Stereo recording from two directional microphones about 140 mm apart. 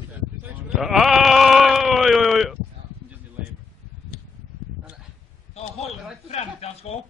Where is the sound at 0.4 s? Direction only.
5° right (ahead or behind).